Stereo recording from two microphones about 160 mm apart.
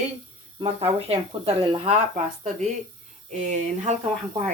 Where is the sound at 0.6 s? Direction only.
35° right (ahead or behind).